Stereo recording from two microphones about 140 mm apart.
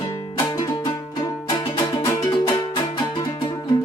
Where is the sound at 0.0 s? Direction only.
25° left (ahead or behind).